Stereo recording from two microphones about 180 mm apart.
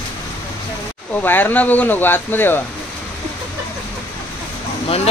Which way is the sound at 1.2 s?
10° left (ahead or behind).